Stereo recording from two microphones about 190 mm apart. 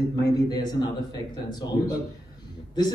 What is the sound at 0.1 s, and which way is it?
Speech, 20° left (ahead or behind).